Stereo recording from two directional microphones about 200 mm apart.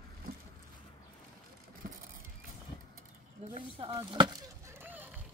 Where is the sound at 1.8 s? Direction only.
45° right (ahead or behind).